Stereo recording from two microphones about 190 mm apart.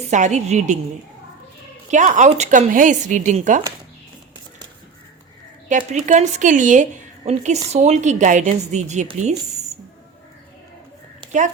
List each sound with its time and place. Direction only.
0.1 s a woman's voice: 40° right (ahead or behind)
1.9 s a woman's voice: 40° right (ahead or behind)
5.6 s a woman's voice: 40° right (ahead or behind)